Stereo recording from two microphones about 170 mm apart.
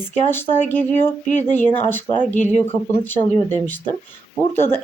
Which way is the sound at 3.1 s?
10° left (ahead or behind).